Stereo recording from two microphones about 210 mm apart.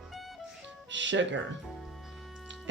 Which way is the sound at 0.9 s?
60° right (ahead or behind).